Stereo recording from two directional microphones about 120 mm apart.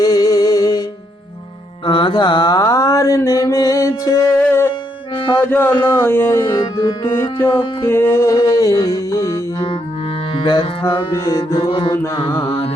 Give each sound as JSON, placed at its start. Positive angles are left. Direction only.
{"t": 0.0, "sound": "music", "side_deg": 30}
{"t": 1.8, "sound": "mantra", "side_deg": 40}
{"t": 4.7, "sound": "music", "side_deg": 45}
{"t": 5.4, "sound": "mantra", "side_deg": 15}
{"t": 7.4, "sound": "music", "side_deg": 40}
{"t": 7.9, "sound": "music", "side_deg": 20}
{"t": 10.4, "sound": "music", "side_deg": 45}
{"t": 11.1, "sound": "mantra", "side_deg": 25}
{"t": 11.5, "sound": "music", "side_deg": 45}
{"t": 12.3, "sound": "mantra", "side_deg": 20}